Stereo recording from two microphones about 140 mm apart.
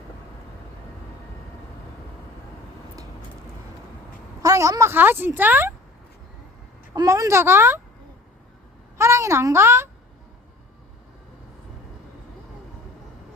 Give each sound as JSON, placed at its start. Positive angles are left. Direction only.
{"t": 4.4, "sound": "speech", "side_deg": -25}
{"t": 6.9, "sound": "speech", "side_deg": -25}
{"t": 9.0, "sound": "a child's voice", "side_deg": -20}